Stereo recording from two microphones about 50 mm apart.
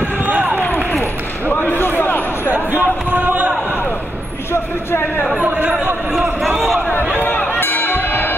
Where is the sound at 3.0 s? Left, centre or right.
Right.